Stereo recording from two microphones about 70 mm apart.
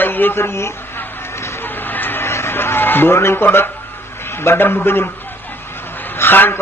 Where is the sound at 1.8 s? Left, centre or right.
Left.